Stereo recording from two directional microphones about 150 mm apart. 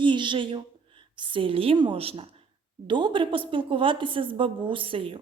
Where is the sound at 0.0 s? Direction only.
30° right (ahead or behind).